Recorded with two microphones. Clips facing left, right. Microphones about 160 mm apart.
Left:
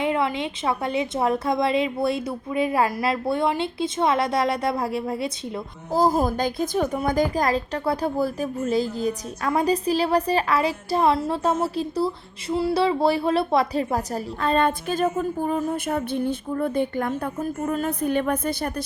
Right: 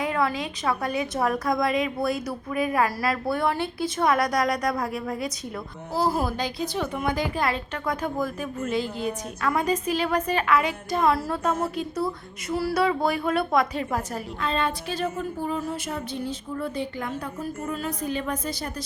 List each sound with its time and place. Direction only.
0.0 s a woman's voice: 25° left (ahead or behind)
5.9 s a woman's voice: 45° left (ahead or behind)